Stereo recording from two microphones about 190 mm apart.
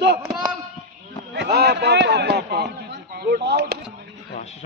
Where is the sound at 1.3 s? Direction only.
60° right (ahead or behind).